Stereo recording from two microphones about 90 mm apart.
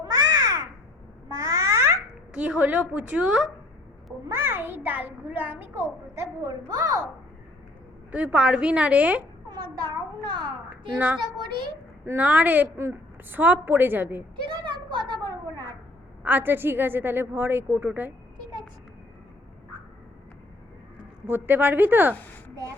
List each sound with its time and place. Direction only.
0.0 s babbling: 45° right (ahead or behind)
2.3 s a woman's voice: 15° right (ahead or behind)
4.3 s a woman's voice: 30° right (ahead or behind)
6.7 s a child's voice: 45° right (ahead or behind)
8.1 s a woman's voice: 15° right (ahead or behind)
9.5 s a child's voice: 55° right (ahead or behind)
10.7 s a woman's voice: 15° right (ahead or behind)
11.2 s a child's voice: 60° right (ahead or behind)
12.0 s a woman's voice: 20° right (ahead or behind)
14.4 s a sound: 65° right (ahead or behind)
16.2 s a woman's voice: 20° right (ahead or behind)
21.2 s a woman's voice: 25° right (ahead or behind)